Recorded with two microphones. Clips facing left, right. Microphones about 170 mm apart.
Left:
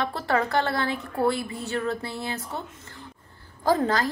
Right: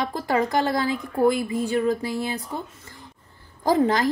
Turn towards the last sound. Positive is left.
turn(degrees=-15)  # may be behind; listen again after turning